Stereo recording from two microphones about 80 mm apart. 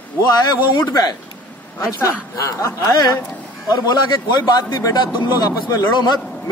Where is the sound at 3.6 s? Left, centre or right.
Left.